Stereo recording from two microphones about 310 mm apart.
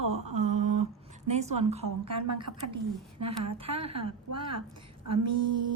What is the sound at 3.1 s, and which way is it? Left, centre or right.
Female singing, right.